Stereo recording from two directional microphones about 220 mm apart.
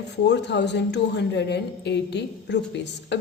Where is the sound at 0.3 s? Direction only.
50° left (ahead or behind).